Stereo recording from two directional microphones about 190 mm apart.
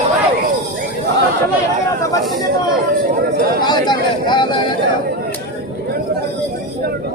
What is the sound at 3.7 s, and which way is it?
Speech, 25° left (ahead or behind).